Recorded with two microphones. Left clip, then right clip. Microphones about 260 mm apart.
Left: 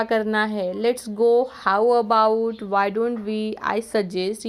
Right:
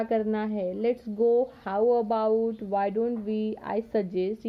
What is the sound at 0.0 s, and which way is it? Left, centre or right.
Speech, centre.